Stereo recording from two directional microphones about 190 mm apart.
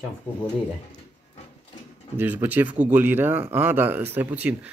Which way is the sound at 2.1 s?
10° right (ahead or behind).